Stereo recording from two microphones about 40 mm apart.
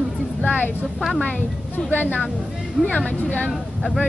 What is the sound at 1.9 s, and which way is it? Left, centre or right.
Speech, left.